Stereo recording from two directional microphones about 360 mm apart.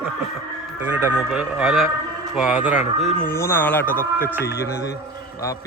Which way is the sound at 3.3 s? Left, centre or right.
Centre.